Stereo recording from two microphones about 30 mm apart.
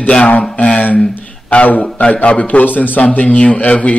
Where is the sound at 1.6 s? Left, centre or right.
Left.